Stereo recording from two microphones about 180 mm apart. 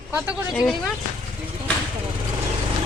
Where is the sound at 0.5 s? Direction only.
Centre (ahead or behind).